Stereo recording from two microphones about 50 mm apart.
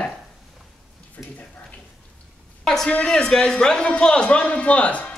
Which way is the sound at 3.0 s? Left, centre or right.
Centre.